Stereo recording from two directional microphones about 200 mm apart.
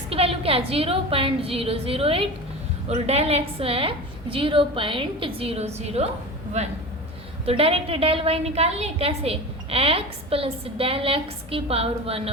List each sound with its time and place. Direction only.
0.1 s a woman's voice: 30° right (ahead or behind)